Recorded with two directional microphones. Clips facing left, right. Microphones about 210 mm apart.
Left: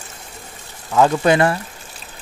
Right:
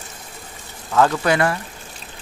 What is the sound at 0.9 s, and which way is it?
Speech, 15° left (ahead or behind).